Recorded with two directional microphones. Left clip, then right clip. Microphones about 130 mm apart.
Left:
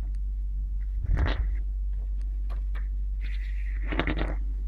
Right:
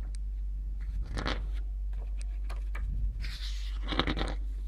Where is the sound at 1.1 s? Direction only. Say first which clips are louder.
Left 1 dB; 45° right (ahead or behind).